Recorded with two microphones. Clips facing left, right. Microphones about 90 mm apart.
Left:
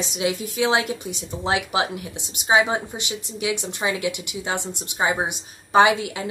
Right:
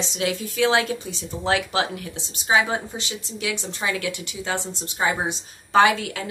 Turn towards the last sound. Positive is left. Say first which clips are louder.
# left 1 dB
turn(degrees=15)  # may be behind; listen again after turning